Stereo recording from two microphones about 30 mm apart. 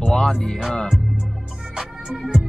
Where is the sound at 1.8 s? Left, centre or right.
Centre.